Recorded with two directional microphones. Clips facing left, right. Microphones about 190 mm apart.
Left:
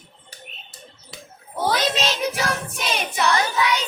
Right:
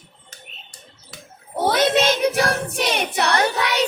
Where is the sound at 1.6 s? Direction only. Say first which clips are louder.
Right 4 dB; 55° right (ahead or behind).